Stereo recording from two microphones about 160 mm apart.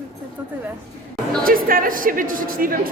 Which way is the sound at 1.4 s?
65° right (ahead or behind).